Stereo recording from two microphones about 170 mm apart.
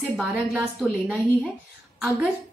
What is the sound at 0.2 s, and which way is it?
A woman's voice, centre (ahead or behind).